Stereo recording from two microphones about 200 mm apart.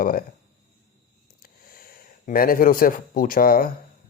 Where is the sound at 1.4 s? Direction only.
45° left (ahead or behind).